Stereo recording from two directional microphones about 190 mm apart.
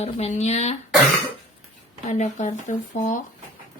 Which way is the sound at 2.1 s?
40° left (ahead or behind).